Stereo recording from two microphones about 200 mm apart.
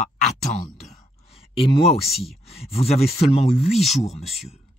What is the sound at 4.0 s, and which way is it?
Speech, 30° left (ahead or behind).